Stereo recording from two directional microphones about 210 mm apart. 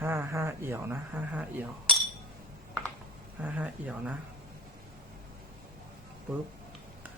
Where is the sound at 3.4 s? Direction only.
5° right (ahead or behind).